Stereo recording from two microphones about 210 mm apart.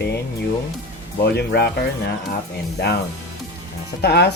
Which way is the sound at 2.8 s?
50° left (ahead or behind).